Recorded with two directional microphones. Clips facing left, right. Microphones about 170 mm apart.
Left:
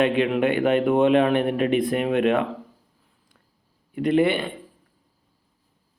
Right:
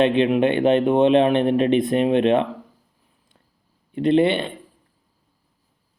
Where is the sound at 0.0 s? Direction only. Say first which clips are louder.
Right 3 dB; 25° right (ahead or behind).